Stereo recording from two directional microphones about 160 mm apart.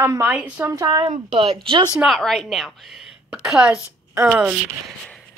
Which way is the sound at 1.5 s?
30° right (ahead or behind).